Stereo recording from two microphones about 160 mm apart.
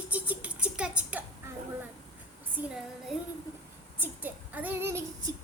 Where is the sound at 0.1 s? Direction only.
10° right (ahead or behind).